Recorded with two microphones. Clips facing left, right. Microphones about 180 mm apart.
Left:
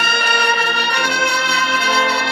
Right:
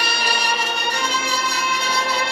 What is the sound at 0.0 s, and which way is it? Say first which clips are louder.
Music: left 4 dB; 55° left (ahead or behind).